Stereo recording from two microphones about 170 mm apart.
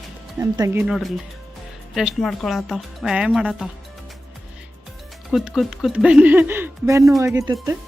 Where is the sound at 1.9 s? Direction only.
Centre (ahead or behind).